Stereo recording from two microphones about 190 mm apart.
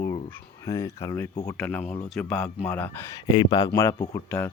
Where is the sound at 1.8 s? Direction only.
30° left (ahead or behind).